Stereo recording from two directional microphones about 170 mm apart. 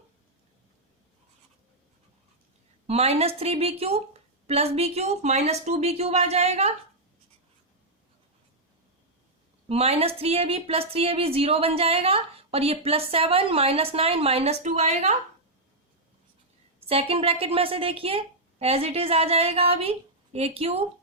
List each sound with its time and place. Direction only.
2.8 s a woman's voice: 40° right (ahead or behind)
9.6 s a woman's voice: 35° right (ahead or behind)
16.8 s a woman's voice: 35° right (ahead or behind)